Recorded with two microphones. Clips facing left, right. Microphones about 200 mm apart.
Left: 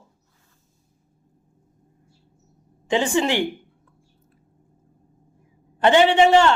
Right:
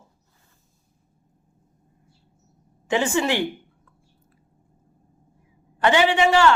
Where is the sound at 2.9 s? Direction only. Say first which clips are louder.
Left 1 dB; 15° left (ahead or behind).